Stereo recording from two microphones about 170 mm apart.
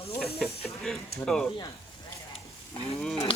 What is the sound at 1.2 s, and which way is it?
Speech, 5° left (ahead or behind).